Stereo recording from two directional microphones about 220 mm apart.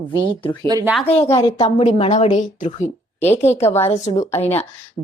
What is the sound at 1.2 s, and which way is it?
Speech, 15° left (ahead or behind).